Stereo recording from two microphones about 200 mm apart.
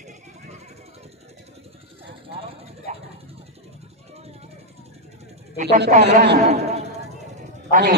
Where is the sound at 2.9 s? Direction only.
35° right (ahead or behind).